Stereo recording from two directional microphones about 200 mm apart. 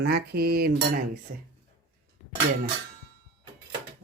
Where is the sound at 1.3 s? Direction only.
45° right (ahead or behind).